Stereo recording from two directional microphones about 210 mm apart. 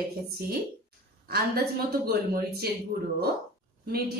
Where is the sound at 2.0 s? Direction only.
45° right (ahead or behind).